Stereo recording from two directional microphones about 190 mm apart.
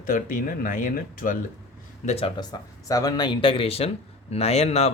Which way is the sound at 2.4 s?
20° left (ahead or behind).